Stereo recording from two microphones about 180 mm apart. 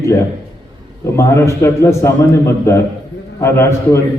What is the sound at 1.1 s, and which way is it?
A man's voice, 15° left (ahead or behind).